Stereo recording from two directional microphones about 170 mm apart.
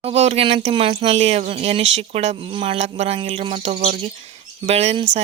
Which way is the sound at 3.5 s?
45° right (ahead or behind).